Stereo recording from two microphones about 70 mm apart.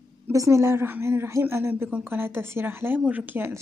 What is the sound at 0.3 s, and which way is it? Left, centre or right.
A woman's voice, right.